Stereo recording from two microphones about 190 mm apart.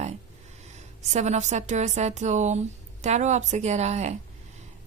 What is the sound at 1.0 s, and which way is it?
A woman's voice, 35° right (ahead or behind).